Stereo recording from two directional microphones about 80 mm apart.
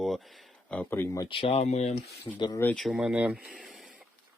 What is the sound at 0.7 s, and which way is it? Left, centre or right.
Speech, centre.